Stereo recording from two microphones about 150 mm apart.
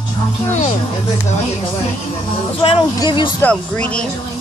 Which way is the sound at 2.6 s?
35° left (ahead or behind).